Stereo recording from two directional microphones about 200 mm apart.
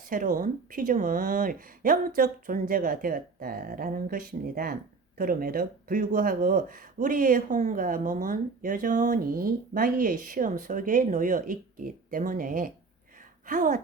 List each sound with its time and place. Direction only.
0.0 s a woman's voice: 40° right (ahead or behind)